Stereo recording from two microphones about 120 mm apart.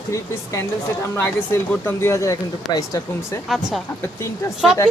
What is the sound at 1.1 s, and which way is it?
Speech, 20° left (ahead or behind).